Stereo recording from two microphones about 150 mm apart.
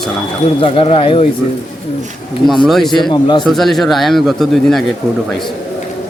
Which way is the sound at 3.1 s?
30° left (ahead or behind).